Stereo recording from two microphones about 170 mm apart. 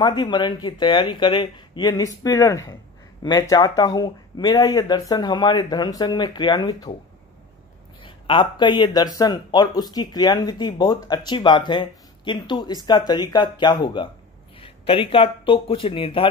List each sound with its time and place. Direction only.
0.0 s speech: 25° left (ahead or behind)
8.0 s speech: 30° left (ahead or behind)